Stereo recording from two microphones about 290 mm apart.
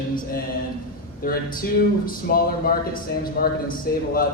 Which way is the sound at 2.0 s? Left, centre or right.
Left.